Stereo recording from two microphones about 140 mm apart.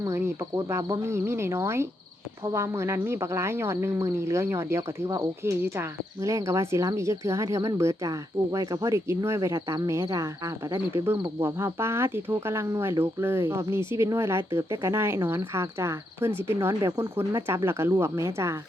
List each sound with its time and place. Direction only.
0.0 s speech: 20° right (ahead or behind)